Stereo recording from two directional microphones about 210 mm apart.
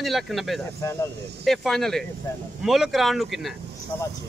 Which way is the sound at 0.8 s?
15° left (ahead or behind).